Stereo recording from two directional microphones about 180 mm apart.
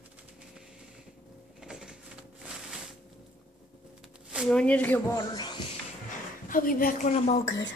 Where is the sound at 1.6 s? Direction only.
5° right (ahead or behind).